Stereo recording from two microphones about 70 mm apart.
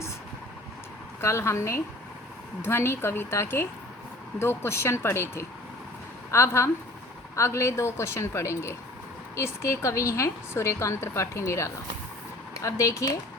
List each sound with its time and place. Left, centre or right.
1.2 s speech: left